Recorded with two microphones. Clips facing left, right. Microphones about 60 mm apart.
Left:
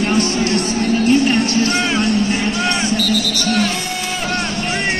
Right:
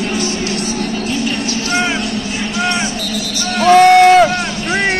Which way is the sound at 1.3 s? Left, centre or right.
Left.